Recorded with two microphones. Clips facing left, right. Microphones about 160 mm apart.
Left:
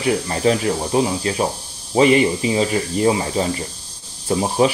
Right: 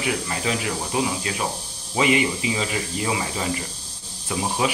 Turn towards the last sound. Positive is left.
turn(degrees=35)  # may be behind; listen again after turning